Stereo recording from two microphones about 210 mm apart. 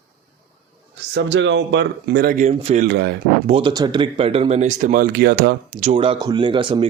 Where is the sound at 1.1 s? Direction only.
60° right (ahead or behind); by 2.8 s 35° right (ahead or behind).